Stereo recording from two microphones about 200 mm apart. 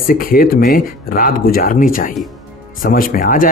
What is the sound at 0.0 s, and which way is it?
Speech, 45° left (ahead or behind).